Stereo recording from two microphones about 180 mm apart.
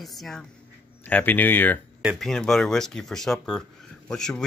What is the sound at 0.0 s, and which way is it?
A woman's voice, centre (ahead or behind).